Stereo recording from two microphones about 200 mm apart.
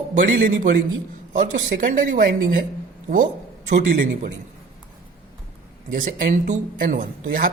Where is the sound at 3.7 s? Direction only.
45° right (ahead or behind).